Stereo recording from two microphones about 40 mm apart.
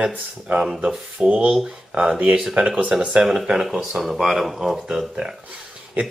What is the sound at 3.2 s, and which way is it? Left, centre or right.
Speech, centre.